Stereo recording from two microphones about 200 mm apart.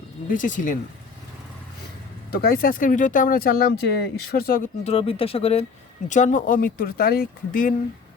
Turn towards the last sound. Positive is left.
turn(degrees=45)  # may be behind; listen again after turning